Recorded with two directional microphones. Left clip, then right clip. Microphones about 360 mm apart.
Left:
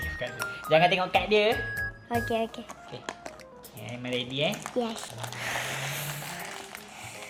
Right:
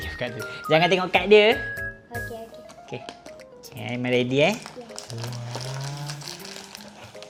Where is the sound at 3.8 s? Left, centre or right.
Right.